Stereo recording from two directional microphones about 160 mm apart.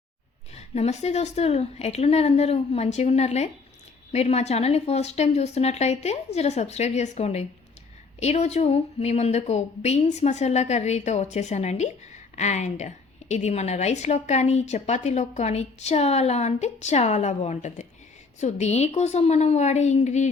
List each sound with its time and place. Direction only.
0.5 s a woman's voice: 40° left (ahead or behind)